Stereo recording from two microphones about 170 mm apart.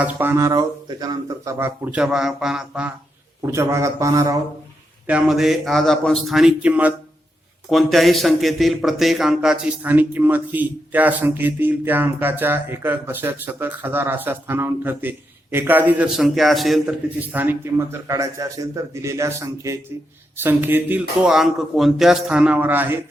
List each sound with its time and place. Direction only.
0.0 s speech: 10° right (ahead or behind)
3.4 s speech: 15° right (ahead or behind)
5.0 s a man's voice: 5° right (ahead or behind)